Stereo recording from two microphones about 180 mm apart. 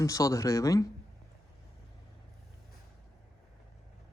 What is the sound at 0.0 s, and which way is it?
Speech, 20° left (ahead or behind).